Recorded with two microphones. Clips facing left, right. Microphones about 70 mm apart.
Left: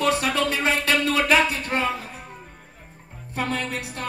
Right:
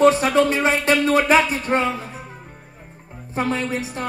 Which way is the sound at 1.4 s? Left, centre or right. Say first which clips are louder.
Right 1 dB; left.